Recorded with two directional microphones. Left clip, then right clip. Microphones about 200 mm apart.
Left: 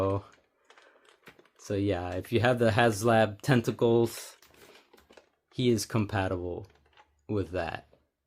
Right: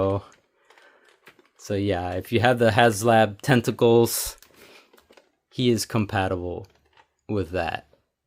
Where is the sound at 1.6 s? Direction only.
35° right (ahead or behind); by 4.3 s 55° right (ahead or behind).